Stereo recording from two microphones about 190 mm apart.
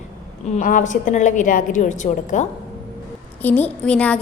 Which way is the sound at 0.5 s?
40° left (ahead or behind).